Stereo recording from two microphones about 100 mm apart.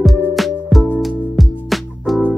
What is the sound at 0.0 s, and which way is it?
Music, centre (ahead or behind).